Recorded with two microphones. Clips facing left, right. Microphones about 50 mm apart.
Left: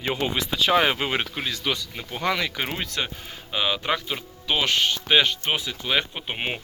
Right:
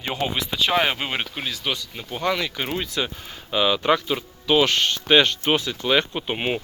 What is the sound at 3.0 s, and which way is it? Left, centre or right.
Speech, left.